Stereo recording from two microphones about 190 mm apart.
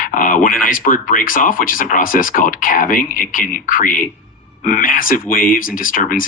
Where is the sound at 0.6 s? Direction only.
45° left (ahead or behind).